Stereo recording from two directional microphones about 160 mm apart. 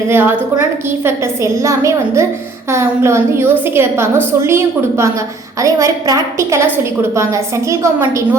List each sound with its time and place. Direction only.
0.1 s a woman's voice: 15° right (ahead or behind)